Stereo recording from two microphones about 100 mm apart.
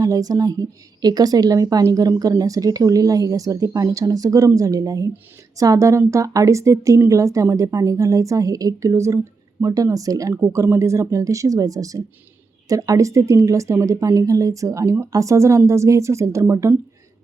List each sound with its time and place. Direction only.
0.0 s a woman's voice: 35° right (ahead or behind)